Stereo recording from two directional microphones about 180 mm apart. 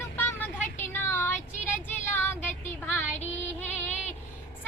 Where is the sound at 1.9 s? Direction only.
10° left (ahead or behind).